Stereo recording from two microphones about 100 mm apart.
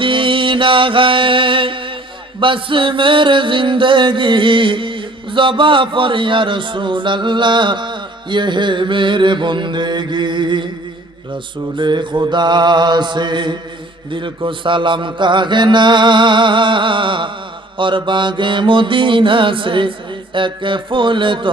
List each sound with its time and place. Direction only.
0.0 s music: 60° right (ahead or behind)
11.8 s mantra: 50° right (ahead or behind)
14.1 s music: 55° right (ahead or behind)